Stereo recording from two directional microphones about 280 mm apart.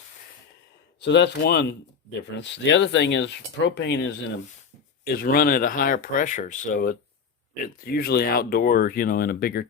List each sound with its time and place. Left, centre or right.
1.0 s speech: left